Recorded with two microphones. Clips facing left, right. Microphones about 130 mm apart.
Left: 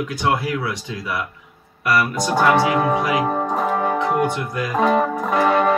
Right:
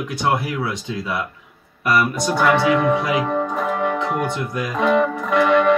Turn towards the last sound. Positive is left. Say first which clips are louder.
# right 1 dB
turn(degrees=40)  # may be behind; listen again after turning